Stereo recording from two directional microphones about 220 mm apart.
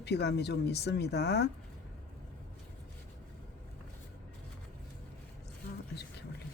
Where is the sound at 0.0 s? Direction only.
50° left (ahead or behind).